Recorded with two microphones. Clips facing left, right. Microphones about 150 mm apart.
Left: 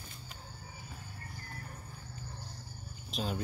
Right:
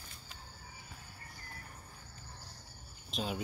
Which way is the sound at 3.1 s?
Centre (ahead or behind).